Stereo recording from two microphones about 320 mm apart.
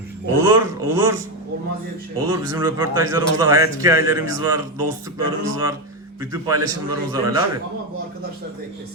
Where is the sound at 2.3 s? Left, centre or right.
Centre.